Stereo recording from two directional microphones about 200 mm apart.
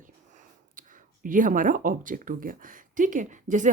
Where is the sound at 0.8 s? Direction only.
40° right (ahead or behind).